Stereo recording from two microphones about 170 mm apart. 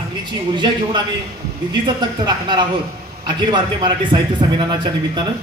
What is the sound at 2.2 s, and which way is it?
Speech, 25° right (ahead or behind).